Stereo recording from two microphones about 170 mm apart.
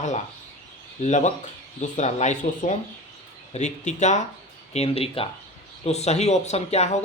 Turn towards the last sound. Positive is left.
turn(degrees=40)  # may be behind; listen again after turning